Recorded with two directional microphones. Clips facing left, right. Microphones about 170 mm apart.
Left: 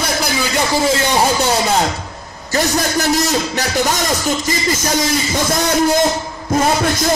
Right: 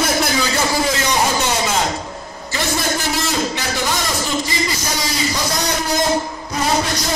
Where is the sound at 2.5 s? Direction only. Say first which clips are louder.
Left 4 dB; 40° left (ahead or behind).